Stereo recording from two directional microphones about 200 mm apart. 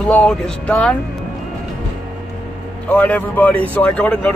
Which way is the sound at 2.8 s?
10° left (ahead or behind).